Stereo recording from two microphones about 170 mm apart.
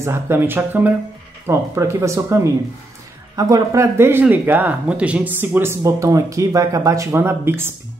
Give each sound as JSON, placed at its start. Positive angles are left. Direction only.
{"t": 0.0, "sound": "speech", "side_deg": -15}